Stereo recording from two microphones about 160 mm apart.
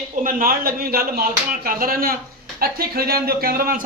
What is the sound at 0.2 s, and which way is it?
Speech, 60° right (ahead or behind).